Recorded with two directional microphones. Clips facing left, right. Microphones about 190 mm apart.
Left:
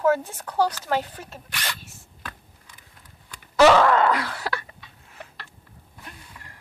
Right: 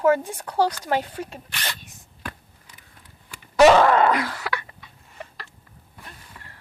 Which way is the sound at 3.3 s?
20° right (ahead or behind).